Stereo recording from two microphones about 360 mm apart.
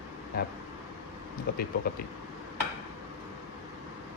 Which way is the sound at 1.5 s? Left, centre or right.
Left.